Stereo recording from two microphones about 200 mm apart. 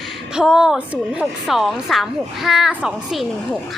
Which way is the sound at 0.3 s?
5° right (ahead or behind).